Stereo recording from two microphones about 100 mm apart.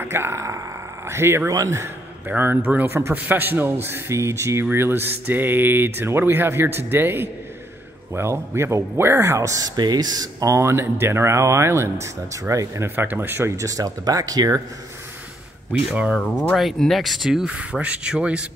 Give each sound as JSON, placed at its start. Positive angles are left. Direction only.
{"t": 0.0, "sound": "a man's voice", "side_deg": -25}
{"t": 9.8, "sound": "speech", "side_deg": -45}
{"t": 15.9, "sound": "speech", "side_deg": -10}
{"t": 16.5, "sound": "speech", "side_deg": 0}